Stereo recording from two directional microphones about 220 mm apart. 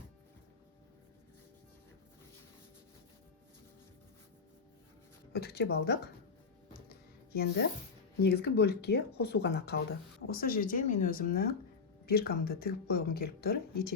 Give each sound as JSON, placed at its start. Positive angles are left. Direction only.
{"t": 5.3, "sound": "speech", "side_deg": 45}
{"t": 7.3, "sound": "speech", "side_deg": 45}